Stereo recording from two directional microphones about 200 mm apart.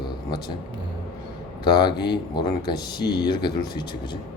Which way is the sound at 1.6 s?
20° left (ahead or behind).